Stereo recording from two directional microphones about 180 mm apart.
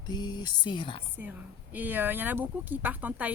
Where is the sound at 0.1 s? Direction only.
25° left (ahead or behind).